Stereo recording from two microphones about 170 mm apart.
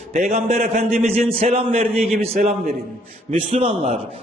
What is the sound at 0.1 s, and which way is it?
Speech, 50° right (ahead or behind).